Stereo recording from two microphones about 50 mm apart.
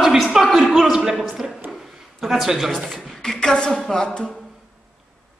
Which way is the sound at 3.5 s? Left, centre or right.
Centre.